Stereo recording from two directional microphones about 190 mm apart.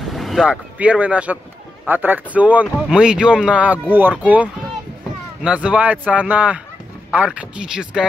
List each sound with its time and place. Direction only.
0.1 s speech: centre (ahead or behind)